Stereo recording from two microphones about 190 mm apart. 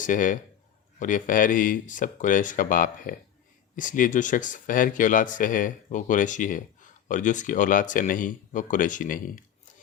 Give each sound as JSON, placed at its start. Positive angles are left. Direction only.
{"t": 0.0, "sound": "speech", "side_deg": 45}